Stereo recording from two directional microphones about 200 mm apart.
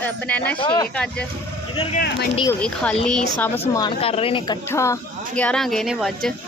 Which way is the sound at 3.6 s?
20° left (ahead or behind).